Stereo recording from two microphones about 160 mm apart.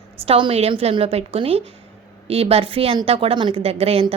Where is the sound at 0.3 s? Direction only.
35° right (ahead or behind).